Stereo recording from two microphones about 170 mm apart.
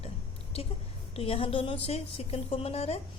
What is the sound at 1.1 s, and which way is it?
A woman's voice, 35° left (ahead or behind).